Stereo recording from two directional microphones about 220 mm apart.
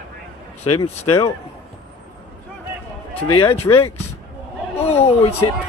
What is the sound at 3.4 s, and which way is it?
Speech, 25° left (ahead or behind).